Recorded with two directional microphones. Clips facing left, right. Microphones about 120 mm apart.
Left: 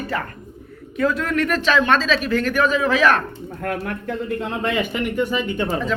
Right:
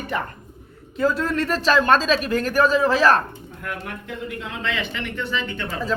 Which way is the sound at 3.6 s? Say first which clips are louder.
Left 7 dB; 50° left (ahead or behind).